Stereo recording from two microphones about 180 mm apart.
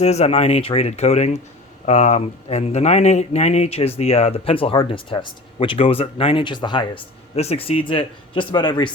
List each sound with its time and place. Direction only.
0.0 s a man's voice: 35° left (ahead or behind)